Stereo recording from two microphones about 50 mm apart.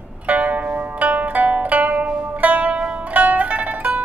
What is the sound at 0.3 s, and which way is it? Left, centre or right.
Zither, right.